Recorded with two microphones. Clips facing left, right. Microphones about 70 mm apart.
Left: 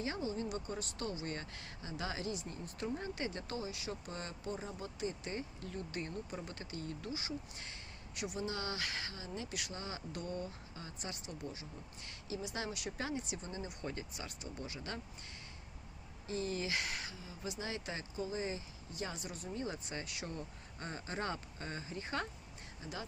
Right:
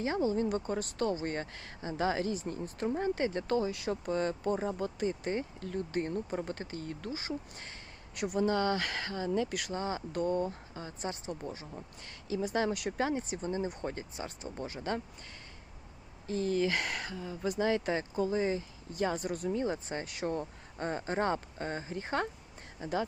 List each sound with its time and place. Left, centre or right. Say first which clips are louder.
0.0 s speech: right 9 dB; right
0.4 s speech: right 8 dB; right
9.7 s speech: right 10 dB; right
13.0 s speech: right 7 dB; right
14.6 s speech: right 9 dB; right
16.2 s speech: right 8 dB; right
19.5 s speech: right 8 dB; right